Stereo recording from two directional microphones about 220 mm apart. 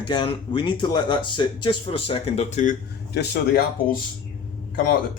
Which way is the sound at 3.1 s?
50° left (ahead or behind).